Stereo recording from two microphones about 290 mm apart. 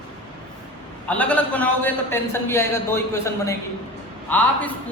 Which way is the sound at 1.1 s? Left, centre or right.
Centre.